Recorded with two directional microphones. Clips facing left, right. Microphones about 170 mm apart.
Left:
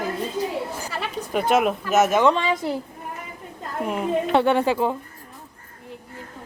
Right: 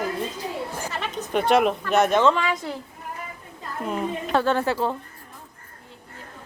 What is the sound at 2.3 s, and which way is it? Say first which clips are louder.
Speech: left 2 dB; 25° left (ahead or behind).